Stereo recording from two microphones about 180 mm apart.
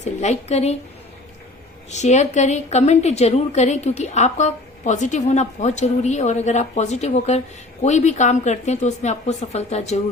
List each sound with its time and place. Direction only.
0.0 s a woman's voice: 40° left (ahead or behind)
1.9 s a woman's voice: 40° left (ahead or behind)